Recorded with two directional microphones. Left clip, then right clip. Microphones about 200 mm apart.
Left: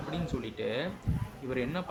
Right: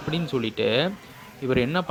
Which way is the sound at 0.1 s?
45° right (ahead or behind).